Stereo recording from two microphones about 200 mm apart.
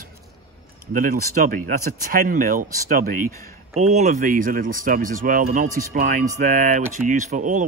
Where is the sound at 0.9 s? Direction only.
45° right (ahead or behind).